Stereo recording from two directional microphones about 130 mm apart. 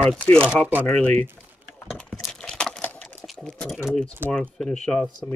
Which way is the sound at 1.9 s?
Centre (ahead or behind).